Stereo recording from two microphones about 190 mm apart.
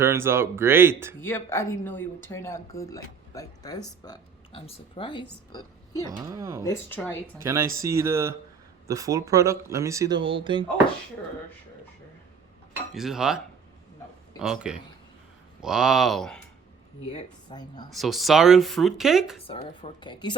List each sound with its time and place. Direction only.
0.0 s speech: 15° right (ahead or behind)
1.2 s speech: 10° left (ahead or behind)
6.1 s speech: 20° right (ahead or behind)
6.6 s speech: 15° left (ahead or behind)
7.4 s speech: 15° right (ahead or behind)
10.2 s speech: 25° right (ahead or behind)
12.9 s speech: centre (ahead or behind)
17.1 s speech: 20° left (ahead or behind)
17.9 s speech: centre (ahead or behind)
19.4 s speech: 30° left (ahead or behind)